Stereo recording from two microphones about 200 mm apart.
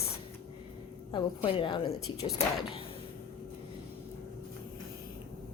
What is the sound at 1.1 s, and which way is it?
A woman's voice, 25° left (ahead or behind).